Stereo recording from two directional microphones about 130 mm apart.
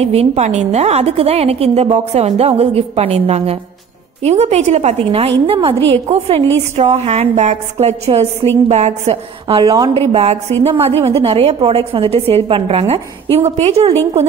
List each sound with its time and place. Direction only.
0.0 s a woman's voice: 50° right (ahead or behind)
9.6 s speech: 30° right (ahead or behind)
9.9 s a woman's voice: 55° right (ahead or behind)